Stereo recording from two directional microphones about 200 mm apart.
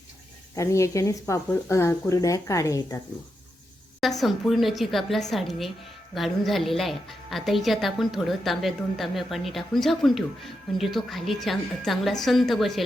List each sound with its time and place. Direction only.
0.5 s speech: 15° left (ahead or behind)
4.2 s speech: centre (ahead or behind)